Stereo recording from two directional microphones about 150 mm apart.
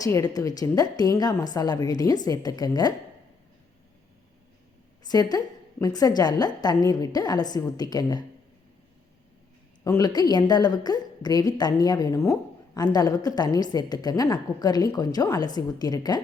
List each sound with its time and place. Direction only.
0.0 s a woman's voice: 20° left (ahead or behind)
5.0 s a woman's voice: 25° left (ahead or behind)
9.8 s a woman's voice: 25° left (ahead or behind)